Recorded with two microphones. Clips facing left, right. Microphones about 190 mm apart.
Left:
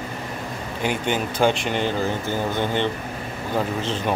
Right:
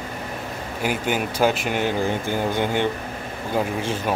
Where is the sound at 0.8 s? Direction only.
5° right (ahead or behind).